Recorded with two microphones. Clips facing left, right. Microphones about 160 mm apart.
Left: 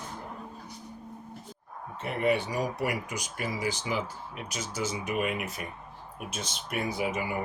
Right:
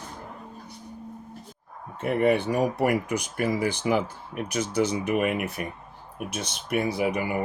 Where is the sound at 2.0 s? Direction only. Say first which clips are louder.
Right 5 dB; 50° right (ahead or behind).